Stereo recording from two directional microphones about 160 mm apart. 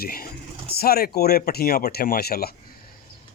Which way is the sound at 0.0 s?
70° left (ahead or behind).